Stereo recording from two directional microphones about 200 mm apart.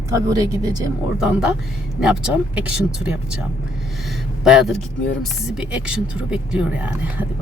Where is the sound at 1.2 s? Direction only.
5° right (ahead or behind).